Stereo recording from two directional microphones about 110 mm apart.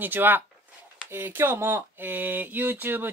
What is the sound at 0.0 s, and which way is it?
Speech, 15° right (ahead or behind).